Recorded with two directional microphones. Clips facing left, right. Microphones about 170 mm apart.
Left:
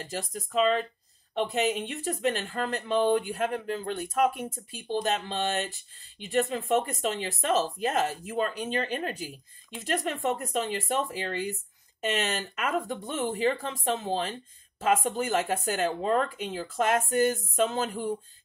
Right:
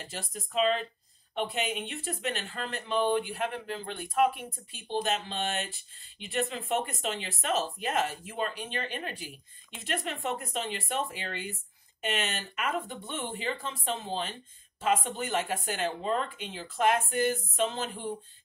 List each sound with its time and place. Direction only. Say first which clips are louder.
0.1 s speech: left 4 dB; 40° left (ahead or behind)